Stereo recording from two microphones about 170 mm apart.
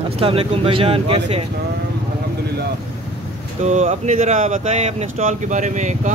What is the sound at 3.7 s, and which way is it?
Speech, 45° right (ahead or behind).